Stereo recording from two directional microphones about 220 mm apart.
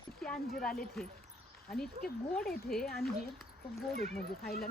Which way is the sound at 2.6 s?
Centre (ahead or behind).